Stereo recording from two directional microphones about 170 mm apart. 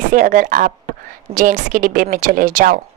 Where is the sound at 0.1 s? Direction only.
50° right (ahead or behind).